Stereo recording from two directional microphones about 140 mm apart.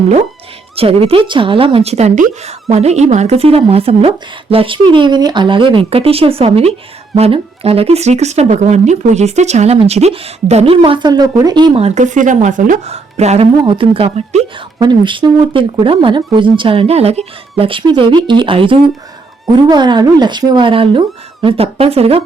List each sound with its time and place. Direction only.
0.8 s a woman's voice: 45° right (ahead or behind)
10.8 s speech: 35° right (ahead or behind)
11.8 s a woman's voice: 55° right (ahead or behind)
13.6 s a woman's voice: 40° right (ahead or behind)